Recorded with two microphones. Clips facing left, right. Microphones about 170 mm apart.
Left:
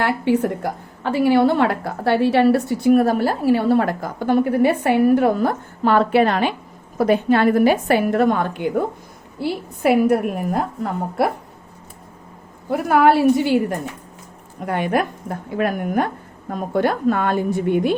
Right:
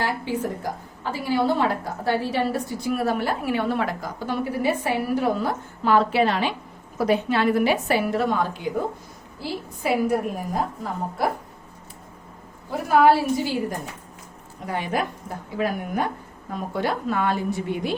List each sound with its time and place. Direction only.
0.0 s a woman's voice: 65° left (ahead or behind)
12.7 s a woman's voice: 60° left (ahead or behind)